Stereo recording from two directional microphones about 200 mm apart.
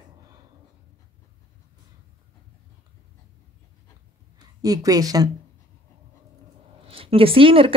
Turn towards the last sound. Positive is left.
turn(degrees=-25)  # may be behind; listen again after turning